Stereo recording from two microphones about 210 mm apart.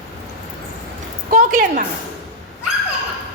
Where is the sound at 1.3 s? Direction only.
40° right (ahead or behind).